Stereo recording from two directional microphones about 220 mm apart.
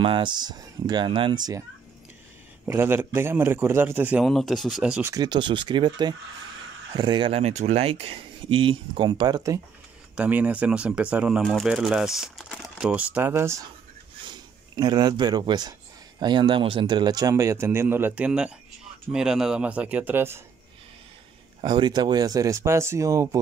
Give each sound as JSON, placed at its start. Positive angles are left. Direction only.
{"t": 0.0, "sound": "speech", "side_deg": -20}
{"t": 2.6, "sound": "a man's voice", "side_deg": -10}
{"t": 5.1, "sound": "a man's voice", "side_deg": -20}
{"t": 21.5, "sound": "a man's voice", "side_deg": -20}